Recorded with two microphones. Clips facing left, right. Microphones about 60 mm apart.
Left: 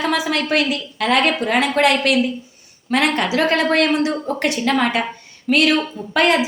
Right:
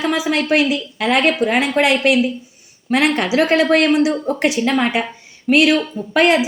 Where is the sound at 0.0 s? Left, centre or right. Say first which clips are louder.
Right 1 dB; centre.